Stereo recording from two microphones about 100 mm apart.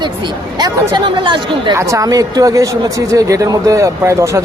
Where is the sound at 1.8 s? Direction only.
30° right (ahead or behind).